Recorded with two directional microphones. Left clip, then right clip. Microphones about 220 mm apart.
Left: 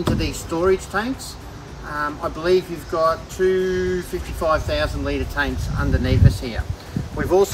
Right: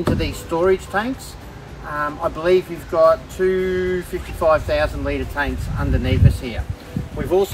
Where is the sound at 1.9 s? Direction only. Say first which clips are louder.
Right 2 dB; 30° right (ahead or behind).